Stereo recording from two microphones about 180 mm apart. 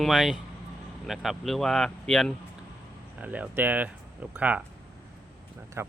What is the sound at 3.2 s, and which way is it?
Speech, 10° right (ahead or behind).